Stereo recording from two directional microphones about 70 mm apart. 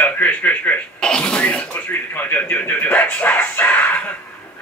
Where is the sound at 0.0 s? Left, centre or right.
Left.